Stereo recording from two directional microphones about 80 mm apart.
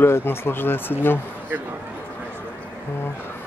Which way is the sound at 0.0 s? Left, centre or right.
Left.